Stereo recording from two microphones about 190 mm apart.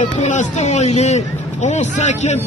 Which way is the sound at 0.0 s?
35° left (ahead or behind).